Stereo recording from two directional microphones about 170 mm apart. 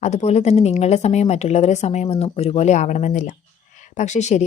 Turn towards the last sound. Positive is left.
turn(degrees=45)  # may be behind; listen again after turning